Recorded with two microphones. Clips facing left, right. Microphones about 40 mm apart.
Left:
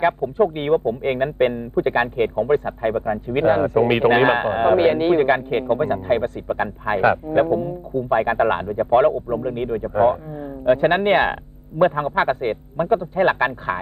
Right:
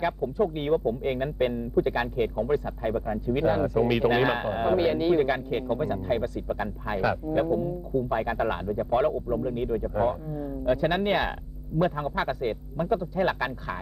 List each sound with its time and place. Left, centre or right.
0.0 s speech: left